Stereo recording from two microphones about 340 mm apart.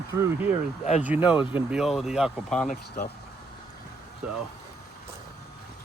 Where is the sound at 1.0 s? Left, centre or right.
Centre.